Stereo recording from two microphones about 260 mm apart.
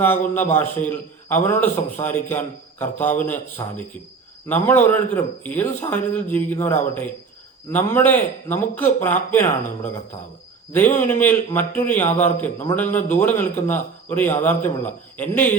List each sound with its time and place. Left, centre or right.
0.0 s a man's voice: centre